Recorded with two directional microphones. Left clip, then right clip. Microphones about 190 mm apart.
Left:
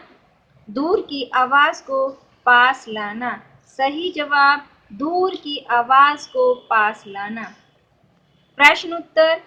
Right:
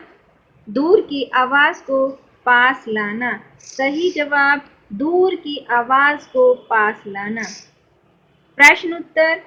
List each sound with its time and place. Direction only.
0.8 s a woman's voice: 20° right (ahead or behind)
8.6 s a woman's voice: 20° right (ahead or behind)